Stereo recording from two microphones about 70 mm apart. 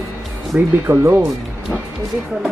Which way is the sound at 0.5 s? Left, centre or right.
Right.